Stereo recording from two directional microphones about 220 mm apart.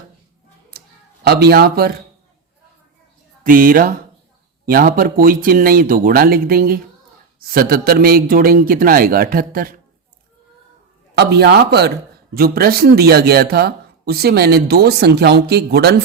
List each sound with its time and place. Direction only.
0.7 s a sound: 45° right (ahead or behind)
1.2 s speech: 45° right (ahead or behind)
3.4 s a man's voice: 40° right (ahead or behind)
11.1 s speech: 45° right (ahead or behind)